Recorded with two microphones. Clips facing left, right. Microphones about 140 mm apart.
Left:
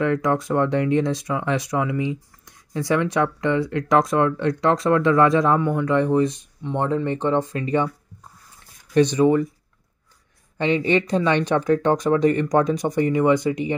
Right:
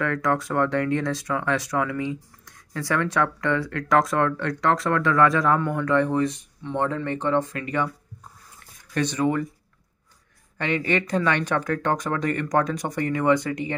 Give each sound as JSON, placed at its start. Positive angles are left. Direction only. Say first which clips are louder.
{"t": 0.0, "sound": "speech", "louder": "left 3 dB", "side_deg": 20}
{"t": 8.9, "sound": "speech", "louder": "left 7 dB", "side_deg": 20}
{"t": 10.6, "sound": "speech", "louder": "left 5 dB", "side_deg": 20}